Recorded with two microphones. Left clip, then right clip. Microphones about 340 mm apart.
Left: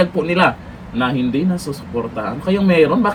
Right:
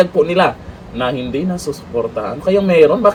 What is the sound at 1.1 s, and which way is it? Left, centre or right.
Speech, right.